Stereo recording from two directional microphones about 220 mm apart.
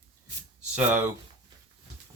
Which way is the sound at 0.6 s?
5° right (ahead or behind).